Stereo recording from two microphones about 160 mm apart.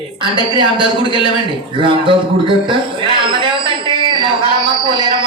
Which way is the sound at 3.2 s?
30° right (ahead or behind).